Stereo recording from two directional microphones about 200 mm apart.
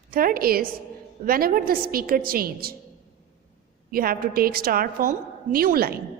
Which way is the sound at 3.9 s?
45° right (ahead or behind).